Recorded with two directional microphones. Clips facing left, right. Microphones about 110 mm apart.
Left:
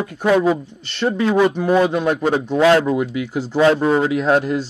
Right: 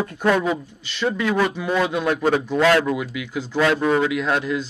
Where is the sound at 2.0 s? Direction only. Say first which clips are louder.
Left 2 dB; 20° left (ahead or behind).